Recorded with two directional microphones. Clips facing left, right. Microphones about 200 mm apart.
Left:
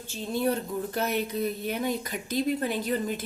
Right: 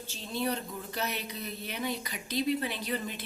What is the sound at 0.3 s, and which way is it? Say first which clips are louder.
Speech: left 6 dB; 50° left (ahead or behind).